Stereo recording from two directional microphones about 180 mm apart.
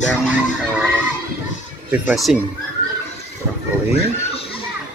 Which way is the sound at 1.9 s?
5° right (ahead or behind).